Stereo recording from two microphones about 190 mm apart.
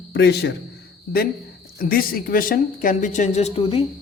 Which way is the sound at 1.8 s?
50° left (ahead or behind).